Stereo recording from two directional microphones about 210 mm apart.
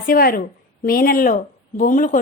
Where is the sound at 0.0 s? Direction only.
45° left (ahead or behind).